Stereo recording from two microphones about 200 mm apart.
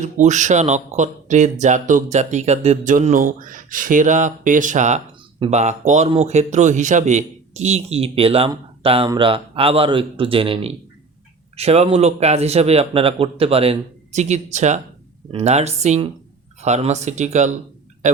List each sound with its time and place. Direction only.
0.0 s a man's voice: 35° right (ahead or behind)